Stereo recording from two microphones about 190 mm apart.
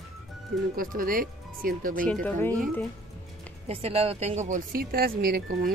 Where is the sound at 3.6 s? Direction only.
30° right (ahead or behind).